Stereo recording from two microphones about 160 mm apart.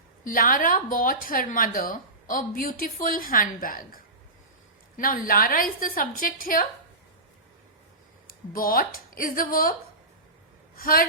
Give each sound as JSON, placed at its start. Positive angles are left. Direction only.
{"t": 0.3, "sound": "speech", "side_deg": 60}
{"t": 8.3, "sound": "speech", "side_deg": 65}
{"t": 10.8, "sound": "a woman's voice", "side_deg": 65}